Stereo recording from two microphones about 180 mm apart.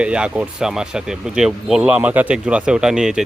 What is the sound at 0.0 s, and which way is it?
Speech, 5° right (ahead or behind).